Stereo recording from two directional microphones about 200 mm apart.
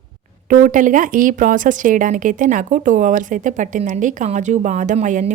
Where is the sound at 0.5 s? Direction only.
40° right (ahead or behind).